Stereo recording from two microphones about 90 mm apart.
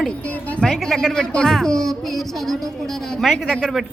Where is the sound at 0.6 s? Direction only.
5° left (ahead or behind).